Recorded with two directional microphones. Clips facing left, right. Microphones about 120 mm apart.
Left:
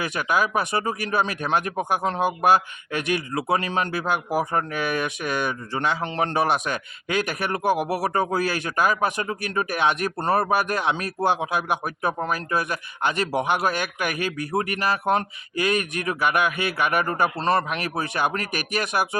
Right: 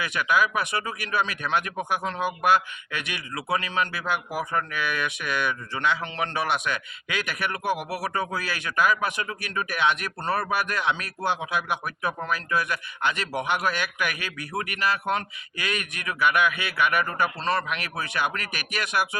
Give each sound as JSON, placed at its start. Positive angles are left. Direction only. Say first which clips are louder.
{"t": 0.0, "sound": "speech", "louder": "left 1 dB", "side_deg": 40}